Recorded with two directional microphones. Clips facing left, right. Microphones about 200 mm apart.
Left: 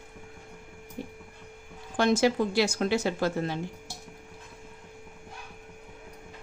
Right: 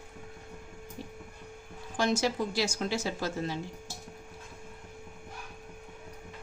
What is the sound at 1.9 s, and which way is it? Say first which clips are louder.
A woman's voice: left 5 dB; 60° left (ahead or behind).